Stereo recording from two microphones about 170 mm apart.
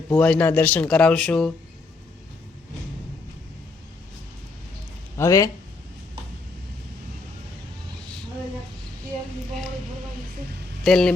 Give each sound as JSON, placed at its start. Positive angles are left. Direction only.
{"t": 0.1, "sound": "speech", "side_deg": 5}
{"t": 5.1, "sound": "speech", "side_deg": 20}
{"t": 10.8, "sound": "speech", "side_deg": 5}